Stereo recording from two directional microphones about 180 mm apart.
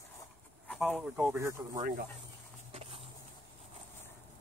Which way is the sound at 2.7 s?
35° right (ahead or behind).